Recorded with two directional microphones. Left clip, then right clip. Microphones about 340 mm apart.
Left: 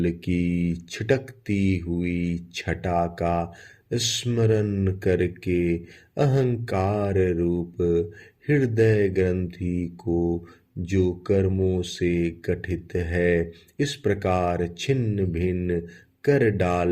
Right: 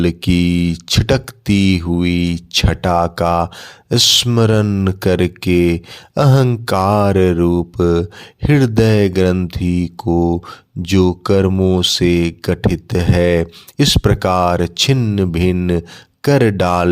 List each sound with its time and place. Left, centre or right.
0.0 s speech: right